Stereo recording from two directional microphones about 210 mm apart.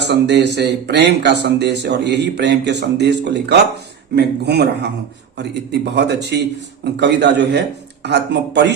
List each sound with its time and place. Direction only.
0.0 s speech: 55° right (ahead or behind)